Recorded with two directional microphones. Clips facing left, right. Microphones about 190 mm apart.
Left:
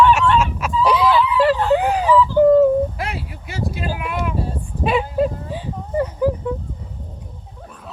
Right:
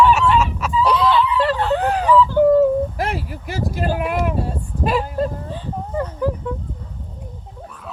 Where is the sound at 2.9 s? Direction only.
45° right (ahead or behind).